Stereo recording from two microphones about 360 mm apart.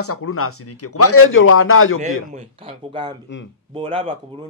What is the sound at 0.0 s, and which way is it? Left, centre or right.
Speech, left.